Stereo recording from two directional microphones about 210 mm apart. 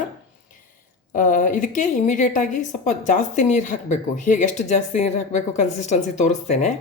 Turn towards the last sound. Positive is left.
turn(degrees=35)  # may be behind; listen again after turning